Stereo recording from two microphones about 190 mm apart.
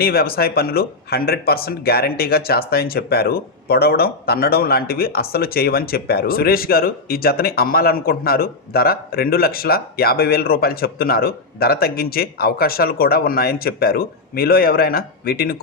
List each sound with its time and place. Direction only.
0.0 s speech: 55° left (ahead or behind)